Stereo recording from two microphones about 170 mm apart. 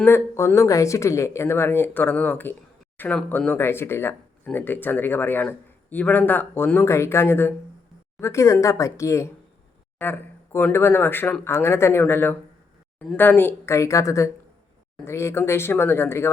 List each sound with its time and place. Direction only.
0.0 s speech: 15° left (ahead or behind)